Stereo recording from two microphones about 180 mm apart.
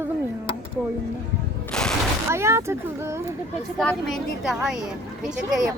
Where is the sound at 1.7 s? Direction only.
5° left (ahead or behind).